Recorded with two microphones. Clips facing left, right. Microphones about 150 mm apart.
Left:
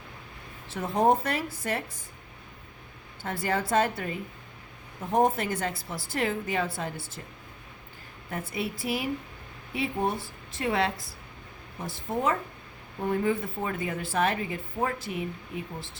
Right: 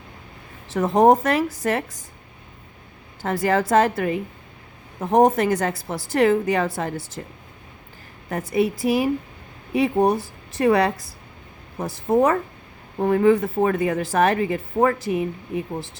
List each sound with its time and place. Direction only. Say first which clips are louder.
0.7 s a woman's voice: right 8 dB; 90° right
3.2 s a woman's voice: right 8 dB; 90° right
7.2 s speech: right 9 dB; 80° right
8.7 s speech: right 10 dB; 45° right (ahead or behind)
9.7 s a woman's voice: right 10 dB; 90° right; by 15.8 s 70° right (ahead or behind)